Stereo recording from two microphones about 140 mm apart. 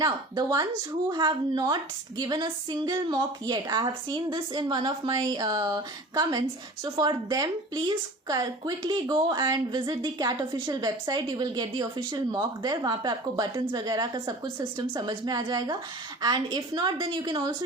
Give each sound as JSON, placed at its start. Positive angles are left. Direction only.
{"t": 0.0, "sound": "a woman's voice", "side_deg": -30}